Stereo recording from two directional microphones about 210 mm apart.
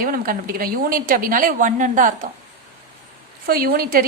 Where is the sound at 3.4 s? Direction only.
45° right (ahead or behind).